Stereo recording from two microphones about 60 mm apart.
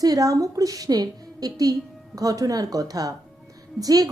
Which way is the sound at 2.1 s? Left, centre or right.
Right.